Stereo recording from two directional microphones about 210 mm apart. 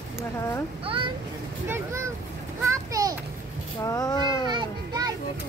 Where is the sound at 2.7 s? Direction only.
15° right (ahead or behind).